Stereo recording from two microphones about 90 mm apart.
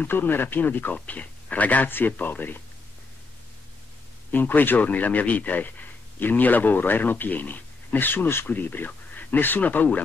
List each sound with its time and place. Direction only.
0.0 s speech: 20° left (ahead or behind)
4.3 s speech: 20° left (ahead or behind)